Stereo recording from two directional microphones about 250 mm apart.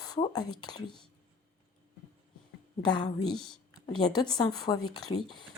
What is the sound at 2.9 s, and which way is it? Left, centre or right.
A woman's voice, centre.